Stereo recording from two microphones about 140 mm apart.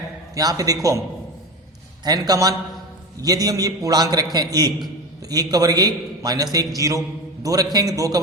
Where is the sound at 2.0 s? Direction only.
25° right (ahead or behind).